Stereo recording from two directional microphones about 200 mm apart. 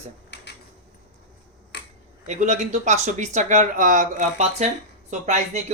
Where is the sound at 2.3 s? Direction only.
35° right (ahead or behind).